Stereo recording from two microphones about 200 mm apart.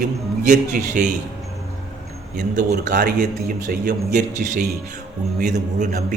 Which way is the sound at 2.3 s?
40° right (ahead or behind).